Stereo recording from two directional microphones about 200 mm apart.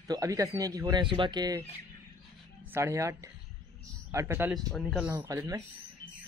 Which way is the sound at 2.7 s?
15° right (ahead or behind).